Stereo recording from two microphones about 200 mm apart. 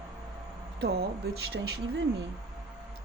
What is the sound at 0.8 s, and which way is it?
Speech, 55° right (ahead or behind).